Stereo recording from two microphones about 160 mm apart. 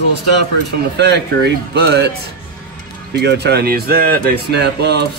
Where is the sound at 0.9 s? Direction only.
90° right.